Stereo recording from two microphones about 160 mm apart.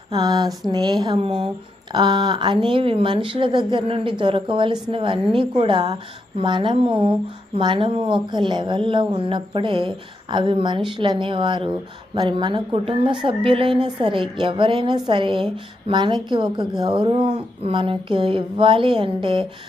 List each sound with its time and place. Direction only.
0.1 s a woman's voice: 25° right (ahead or behind)